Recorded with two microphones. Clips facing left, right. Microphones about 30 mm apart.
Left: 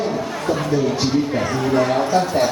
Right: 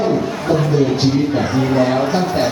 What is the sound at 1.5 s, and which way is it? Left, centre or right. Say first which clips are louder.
Speech: right 1 dB; right.